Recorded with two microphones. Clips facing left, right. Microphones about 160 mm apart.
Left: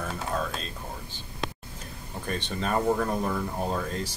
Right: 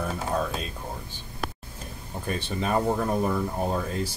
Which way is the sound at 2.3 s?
10° right (ahead or behind).